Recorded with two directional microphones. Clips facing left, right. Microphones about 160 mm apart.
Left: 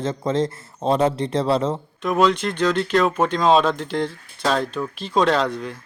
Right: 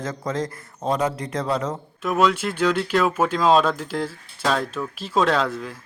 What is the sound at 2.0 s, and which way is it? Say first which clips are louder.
Speech: left 1 dB; 5° right (ahead or behind).